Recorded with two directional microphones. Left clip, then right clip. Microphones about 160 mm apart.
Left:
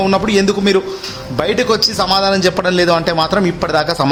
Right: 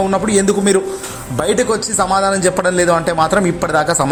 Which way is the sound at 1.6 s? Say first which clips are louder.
Left 2 dB; 20° left (ahead or behind).